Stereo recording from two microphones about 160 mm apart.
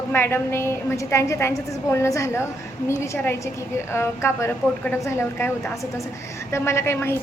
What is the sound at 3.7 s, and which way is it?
A woman's voice, 15° left (ahead or behind).